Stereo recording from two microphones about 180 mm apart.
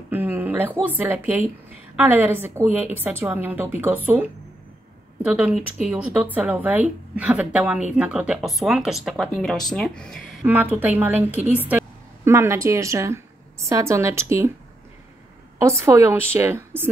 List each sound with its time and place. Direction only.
0.1 s a sound: 10° right (ahead or behind)
0.7 s a woman's voice: 10° right (ahead or behind)
10.4 s a woman's voice: 10° right (ahead or behind)
12.3 s a woman's voice: 15° right (ahead or behind)
15.6 s a woman's voice: 15° right (ahead or behind)